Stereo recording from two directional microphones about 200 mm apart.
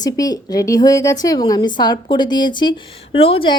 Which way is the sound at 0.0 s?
20° left (ahead or behind).